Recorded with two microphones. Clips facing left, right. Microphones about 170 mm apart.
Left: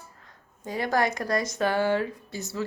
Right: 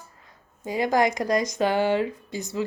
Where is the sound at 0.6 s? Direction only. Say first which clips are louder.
Right 4 dB; 15° right (ahead or behind).